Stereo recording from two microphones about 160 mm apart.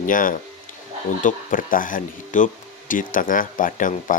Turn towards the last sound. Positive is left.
turn(degrees=55)  # may be behind; listen again after turning